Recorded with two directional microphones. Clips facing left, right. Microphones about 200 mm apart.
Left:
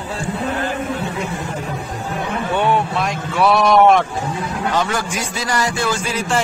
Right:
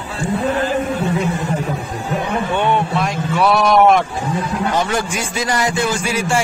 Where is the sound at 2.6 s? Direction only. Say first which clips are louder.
Left 1 dB; centre (ahead or behind).